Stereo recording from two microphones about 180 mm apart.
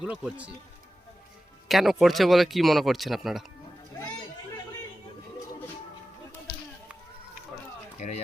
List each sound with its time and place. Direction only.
0.0 s speech: 5° right (ahead or behind)
1.6 s speech: centre (ahead or behind)
7.9 s speech: 40° left (ahead or behind)